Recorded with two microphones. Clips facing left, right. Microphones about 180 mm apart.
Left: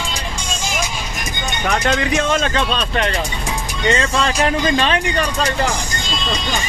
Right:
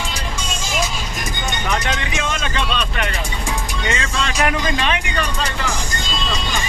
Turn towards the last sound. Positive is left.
turn(degrees=35)  # may be behind; listen again after turning